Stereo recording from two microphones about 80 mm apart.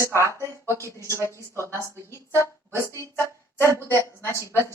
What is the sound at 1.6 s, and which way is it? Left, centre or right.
Speech, left.